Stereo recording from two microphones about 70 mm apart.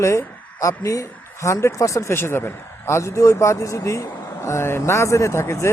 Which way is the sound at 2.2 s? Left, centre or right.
Left.